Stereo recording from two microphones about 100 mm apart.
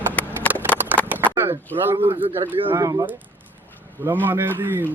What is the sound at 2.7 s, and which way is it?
Speech, 35° right (ahead or behind).